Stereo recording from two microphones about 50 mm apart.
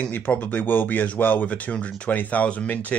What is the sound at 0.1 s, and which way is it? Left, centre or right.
Speech, left.